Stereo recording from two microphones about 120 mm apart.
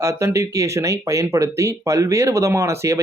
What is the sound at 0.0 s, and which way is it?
Speech, 25° right (ahead or behind).